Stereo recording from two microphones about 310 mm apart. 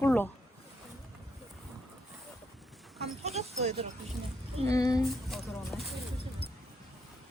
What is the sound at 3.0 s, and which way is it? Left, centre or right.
Speech, centre.